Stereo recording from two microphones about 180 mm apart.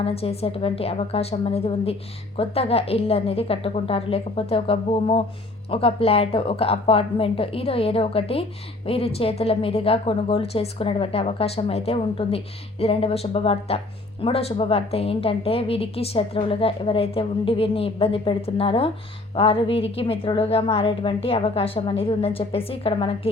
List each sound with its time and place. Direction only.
0.0 s speech: 35° left (ahead or behind)